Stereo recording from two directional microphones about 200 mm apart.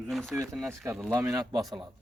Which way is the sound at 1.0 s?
15° right (ahead or behind).